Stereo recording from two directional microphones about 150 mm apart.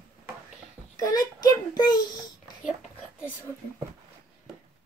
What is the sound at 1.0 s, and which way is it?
Child singing, 25° left (ahead or behind).